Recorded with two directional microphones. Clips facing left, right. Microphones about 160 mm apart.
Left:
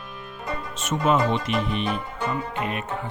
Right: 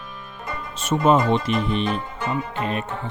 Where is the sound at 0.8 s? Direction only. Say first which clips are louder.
Right 4 dB; 35° right (ahead or behind).